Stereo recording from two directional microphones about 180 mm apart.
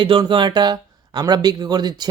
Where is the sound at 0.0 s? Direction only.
25° right (ahead or behind).